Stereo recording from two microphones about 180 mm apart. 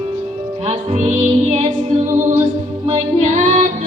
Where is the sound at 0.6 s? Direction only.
40° right (ahead or behind).